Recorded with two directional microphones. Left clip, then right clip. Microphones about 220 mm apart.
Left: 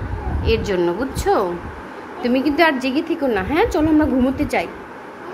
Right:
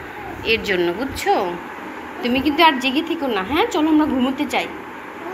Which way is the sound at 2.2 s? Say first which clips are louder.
Right 1 dB; 25° left (ahead or behind).